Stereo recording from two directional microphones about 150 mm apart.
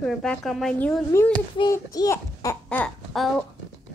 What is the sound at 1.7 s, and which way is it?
Speech, 20° left (ahead or behind).